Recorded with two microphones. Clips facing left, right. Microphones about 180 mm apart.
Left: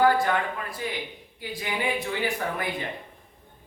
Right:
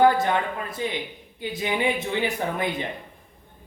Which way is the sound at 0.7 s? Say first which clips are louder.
Right 3 dB; 20° right (ahead or behind).